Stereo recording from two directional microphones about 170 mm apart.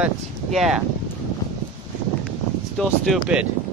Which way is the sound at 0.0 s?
Centre (ahead or behind).